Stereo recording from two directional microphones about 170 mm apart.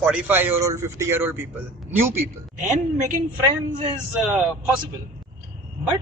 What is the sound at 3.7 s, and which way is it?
Speech, 30° right (ahead or behind).